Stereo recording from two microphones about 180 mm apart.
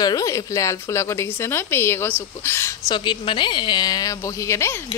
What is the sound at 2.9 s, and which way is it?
Speech, 25° left (ahead or behind).